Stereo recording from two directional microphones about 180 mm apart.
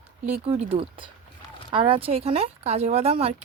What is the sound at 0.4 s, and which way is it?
Speech, 30° right (ahead or behind).